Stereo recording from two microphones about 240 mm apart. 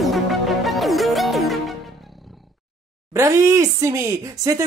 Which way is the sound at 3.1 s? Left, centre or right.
Centre.